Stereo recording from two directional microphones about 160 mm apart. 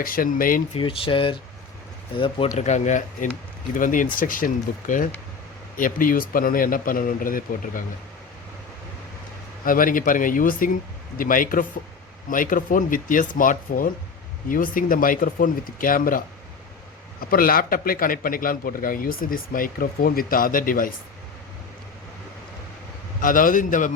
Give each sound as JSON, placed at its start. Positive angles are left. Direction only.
{"t": 0.0, "sound": "a man's voice", "side_deg": 60}
{"t": 0.7, "sound": "speech", "side_deg": 35}
{"t": 2.6, "sound": "a man's voice", "side_deg": 45}
{"t": 9.6, "sound": "a man's voice", "side_deg": 60}
{"t": 23.2, "sound": "a man's voice", "side_deg": 60}